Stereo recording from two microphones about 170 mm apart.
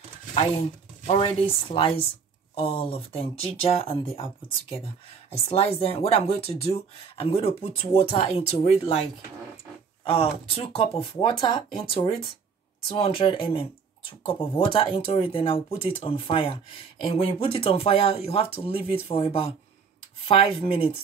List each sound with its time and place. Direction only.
1.0 s speech: 30° left (ahead or behind)
10.1 s speech: 30° left (ahead or behind)